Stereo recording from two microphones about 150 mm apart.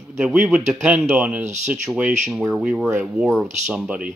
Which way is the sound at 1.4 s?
50° right (ahead or behind).